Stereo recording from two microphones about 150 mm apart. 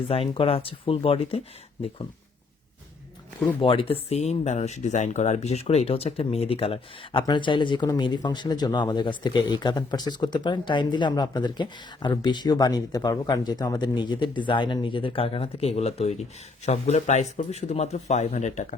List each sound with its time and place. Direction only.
0.1 s speech: 40° left (ahead or behind)
3.6 s a man's voice: 35° left (ahead or behind); by 18.7 s 55° left (ahead or behind)